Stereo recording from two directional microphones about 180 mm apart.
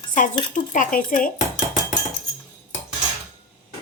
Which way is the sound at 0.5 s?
45° left (ahead or behind).